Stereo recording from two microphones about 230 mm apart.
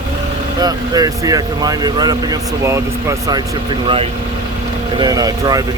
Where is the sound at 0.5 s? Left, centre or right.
Centre.